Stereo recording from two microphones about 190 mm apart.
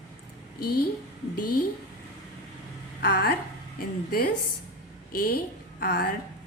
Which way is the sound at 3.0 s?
55° left (ahead or behind).